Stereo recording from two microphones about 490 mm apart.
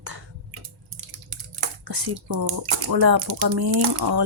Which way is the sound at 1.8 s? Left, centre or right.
Right.